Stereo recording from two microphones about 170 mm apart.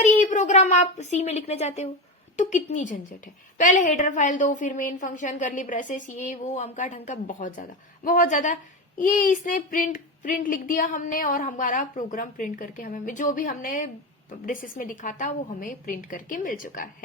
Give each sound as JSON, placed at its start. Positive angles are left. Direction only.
{"t": 0.0, "sound": "a child's voice", "side_deg": 50}